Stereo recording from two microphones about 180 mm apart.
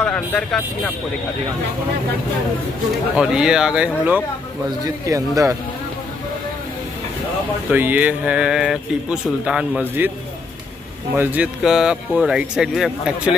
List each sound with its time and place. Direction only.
0.0 s speech: 5° left (ahead or behind)
3.2 s speech: 5° right (ahead or behind)
4.8 s speech: 20° right (ahead or behind)
7.7 s speech: 10° right (ahead or behind)
11.1 s speech: 10° right (ahead or behind)